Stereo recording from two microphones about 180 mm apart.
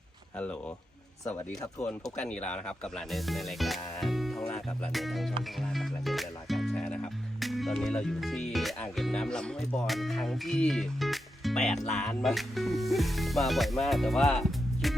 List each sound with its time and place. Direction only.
2.1 s speech: 5° left (ahead or behind)